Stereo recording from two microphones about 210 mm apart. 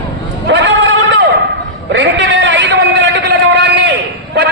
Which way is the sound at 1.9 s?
55° right (ahead or behind).